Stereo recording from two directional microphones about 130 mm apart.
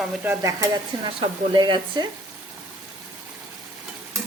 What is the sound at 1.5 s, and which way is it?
Stir, 35° right (ahead or behind).